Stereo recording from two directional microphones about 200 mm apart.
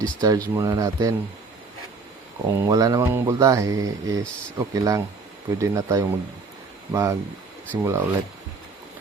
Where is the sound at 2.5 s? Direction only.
15° right (ahead or behind).